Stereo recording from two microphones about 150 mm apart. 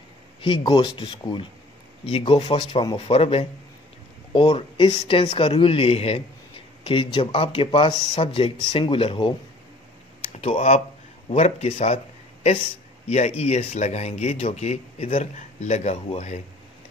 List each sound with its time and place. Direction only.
0.4 s speech: 30° left (ahead or behind)
10.4 s speech: 50° left (ahead or behind)
13.1 s speech: 50° left (ahead or behind)